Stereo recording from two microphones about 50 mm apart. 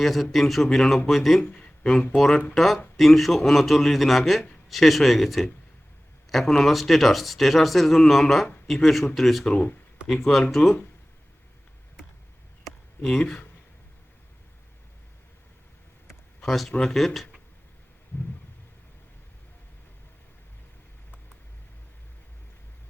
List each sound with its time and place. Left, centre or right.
0.0 s a man's voice: centre
1.5 s a sound: left
1.8 s a man's voice: centre
13.0 s speech: centre
16.4 s a man's voice: centre